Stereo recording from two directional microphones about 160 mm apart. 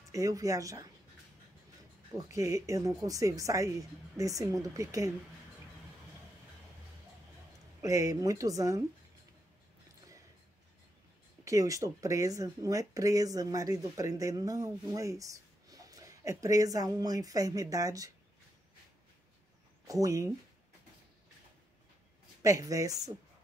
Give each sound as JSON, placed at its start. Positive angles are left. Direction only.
{"t": 0.1, "sound": "speech", "side_deg": -20}
{"t": 2.1, "sound": "speech", "side_deg": -20}
{"t": 7.8, "sound": "speech", "side_deg": -20}
{"t": 11.4, "sound": "speech", "side_deg": -20}
{"t": 19.9, "sound": "speech", "side_deg": -20}
{"t": 22.4, "sound": "speech", "side_deg": -20}